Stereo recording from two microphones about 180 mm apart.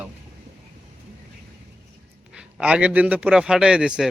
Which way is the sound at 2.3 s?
5° right (ahead or behind).